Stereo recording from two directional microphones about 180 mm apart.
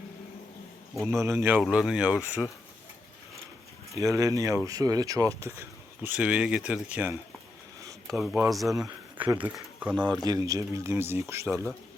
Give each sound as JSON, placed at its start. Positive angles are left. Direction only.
{"t": 1.2, "sound": "speech", "side_deg": -15}
{"t": 1.6, "sound": "speech", "side_deg": 0}
{"t": 3.9, "sound": "speech", "side_deg": -15}
{"t": 9.9, "sound": "speech", "side_deg": 0}
{"t": 10.2, "sound": "speech", "side_deg": -20}